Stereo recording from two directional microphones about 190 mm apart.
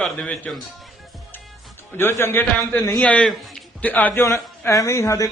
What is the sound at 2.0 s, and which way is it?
A man's voice, 15° left (ahead or behind).